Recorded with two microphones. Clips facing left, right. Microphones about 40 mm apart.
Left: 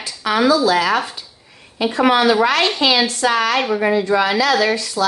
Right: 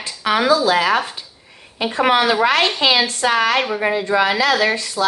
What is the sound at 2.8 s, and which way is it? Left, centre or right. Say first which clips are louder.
Speech: even; right.